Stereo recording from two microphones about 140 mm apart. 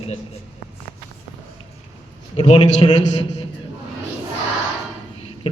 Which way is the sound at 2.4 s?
45° left (ahead or behind).